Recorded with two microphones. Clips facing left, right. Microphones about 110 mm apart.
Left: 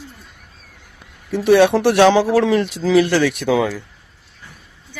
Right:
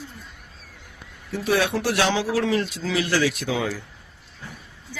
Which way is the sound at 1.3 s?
70° left (ahead or behind).